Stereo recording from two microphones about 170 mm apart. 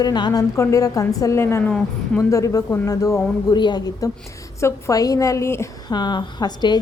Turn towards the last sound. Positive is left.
turn(degrees=25)  # may be behind; listen again after turning